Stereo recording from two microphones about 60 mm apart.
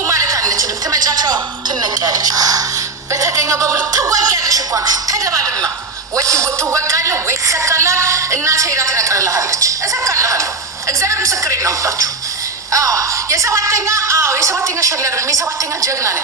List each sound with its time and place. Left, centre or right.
0.1 s a sound: right
3.1 s music: right
6.1 s a woman's voice: right